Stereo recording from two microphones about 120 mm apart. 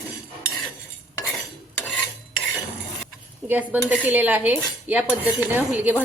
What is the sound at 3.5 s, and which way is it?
Cutlery, 15° right (ahead or behind).